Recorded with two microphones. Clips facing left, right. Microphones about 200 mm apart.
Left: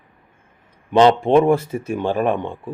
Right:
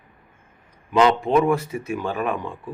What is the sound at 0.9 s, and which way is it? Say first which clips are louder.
Speech: left 5 dB; 30° left (ahead or behind).